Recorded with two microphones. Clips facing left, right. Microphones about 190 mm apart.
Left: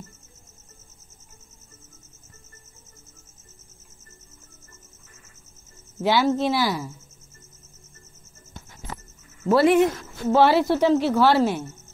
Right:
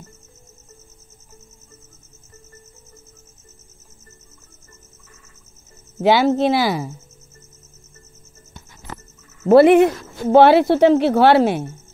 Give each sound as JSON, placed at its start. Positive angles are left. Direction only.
{"t": 6.0, "sound": "speech", "side_deg": -70}
{"t": 9.5, "sound": "a woman's voice", "side_deg": -60}